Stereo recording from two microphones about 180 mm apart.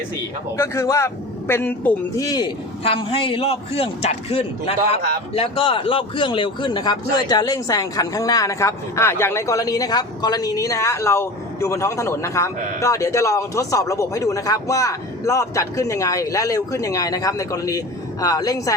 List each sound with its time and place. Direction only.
0.5 s a man's voice: 15° left (ahead or behind)